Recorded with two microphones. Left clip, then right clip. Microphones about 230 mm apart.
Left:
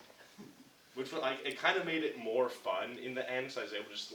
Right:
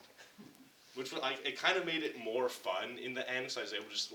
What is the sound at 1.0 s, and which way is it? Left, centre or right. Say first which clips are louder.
Speech: left 1 dB; centre.